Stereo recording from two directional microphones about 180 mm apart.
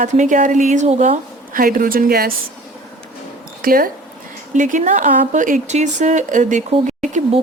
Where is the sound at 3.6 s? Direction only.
55° right (ahead or behind).